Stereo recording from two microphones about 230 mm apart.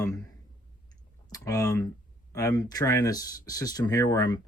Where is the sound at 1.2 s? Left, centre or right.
Centre.